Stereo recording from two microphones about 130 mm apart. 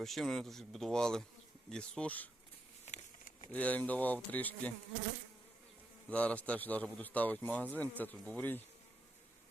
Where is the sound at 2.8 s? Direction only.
60° left (ahead or behind).